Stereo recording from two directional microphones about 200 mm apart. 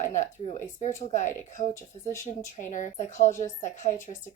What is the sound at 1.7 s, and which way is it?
Speech, 15° left (ahead or behind).